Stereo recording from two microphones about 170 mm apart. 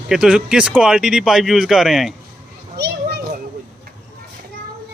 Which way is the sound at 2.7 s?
75° right (ahead or behind).